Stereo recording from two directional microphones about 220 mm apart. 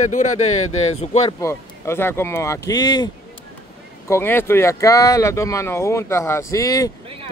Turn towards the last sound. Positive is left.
turn(degrees=15)  # may be behind; listen again after turning